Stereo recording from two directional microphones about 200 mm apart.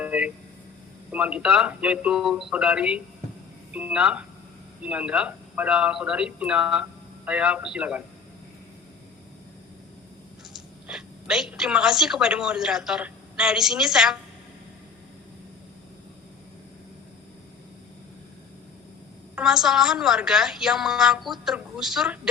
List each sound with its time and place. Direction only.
0.0 s vehicle: 5° right (ahead or behind)
1.1 s a woman's voice: 5° right (ahead or behind)
10.8 s a woman's voice: 5° right (ahead or behind)
19.4 s a woman's voice: 5° right (ahead or behind)